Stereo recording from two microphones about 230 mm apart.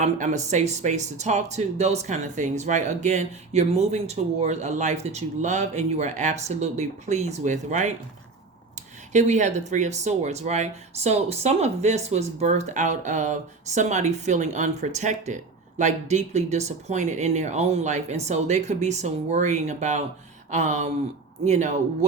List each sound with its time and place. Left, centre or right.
0.0 s speech: right
9.1 s speech: right